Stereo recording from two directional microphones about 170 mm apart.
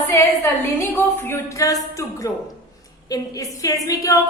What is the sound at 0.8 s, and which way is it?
A woman's voice, 10° left (ahead or behind).